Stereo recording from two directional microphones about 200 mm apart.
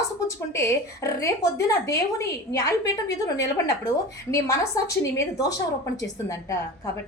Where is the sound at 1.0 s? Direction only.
15° left (ahead or behind).